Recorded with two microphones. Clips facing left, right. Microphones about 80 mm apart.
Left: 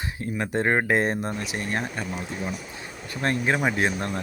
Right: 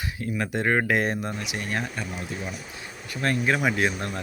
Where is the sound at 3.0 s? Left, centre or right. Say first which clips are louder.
Even; left.